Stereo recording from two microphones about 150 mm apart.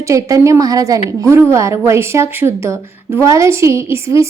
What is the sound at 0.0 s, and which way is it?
A woman's voice, 20° right (ahead or behind).